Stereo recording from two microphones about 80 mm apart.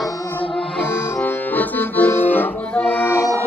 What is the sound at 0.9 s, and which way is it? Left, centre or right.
Accordion, left.